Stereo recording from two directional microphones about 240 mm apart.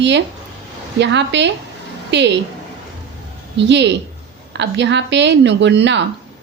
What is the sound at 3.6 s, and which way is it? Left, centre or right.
A woman's voice, right.